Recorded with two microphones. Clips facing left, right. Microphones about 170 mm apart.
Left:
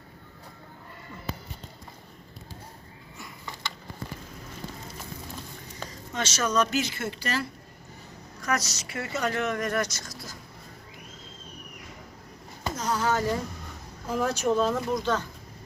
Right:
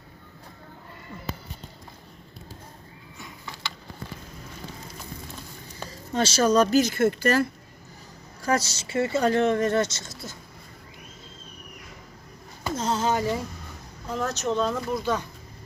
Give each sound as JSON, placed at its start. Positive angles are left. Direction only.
{"t": 6.1, "sound": "speech", "side_deg": -30}
{"t": 8.4, "sound": "speech", "side_deg": -30}
{"t": 12.7, "sound": "a sound", "side_deg": -25}
{"t": 14.1, "sound": "speech", "side_deg": 10}